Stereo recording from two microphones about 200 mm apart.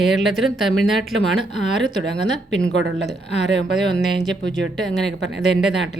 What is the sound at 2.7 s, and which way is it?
Speech, 65° right (ahead or behind).